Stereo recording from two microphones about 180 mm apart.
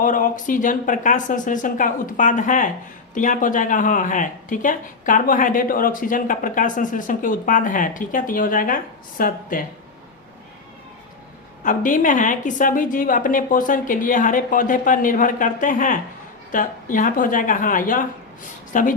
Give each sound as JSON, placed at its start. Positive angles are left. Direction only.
{"t": 0.0, "sound": "speech", "side_deg": 50}
{"t": 11.6, "sound": "speech", "side_deg": 45}